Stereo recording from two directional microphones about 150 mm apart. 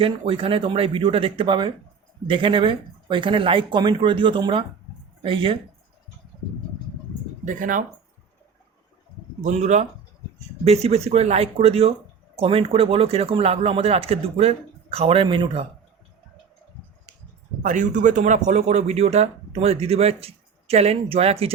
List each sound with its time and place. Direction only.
0.0 s speech: 40° right (ahead or behind)
7.4 s speech: 60° right (ahead or behind)
9.4 s speech: 50° right (ahead or behind); by 15.6 s 35° right (ahead or behind)
17.6 s speech: 60° right (ahead or behind); by 21.5 s 40° right (ahead or behind)